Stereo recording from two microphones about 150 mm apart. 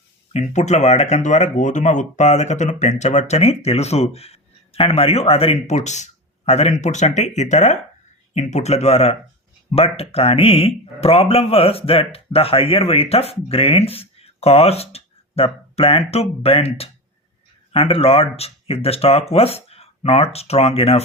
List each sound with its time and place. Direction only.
0.3 s speech: 50° left (ahead or behind)